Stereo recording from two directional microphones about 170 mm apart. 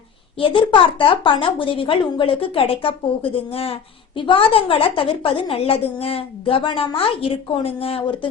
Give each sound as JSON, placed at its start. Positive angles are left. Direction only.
{"t": 0.3, "sound": "a woman's voice", "side_deg": 30}